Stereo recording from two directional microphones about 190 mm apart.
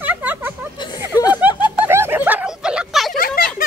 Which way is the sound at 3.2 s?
50° left (ahead or behind).